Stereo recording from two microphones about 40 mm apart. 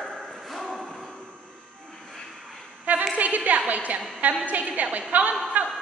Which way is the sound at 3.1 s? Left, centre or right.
Right.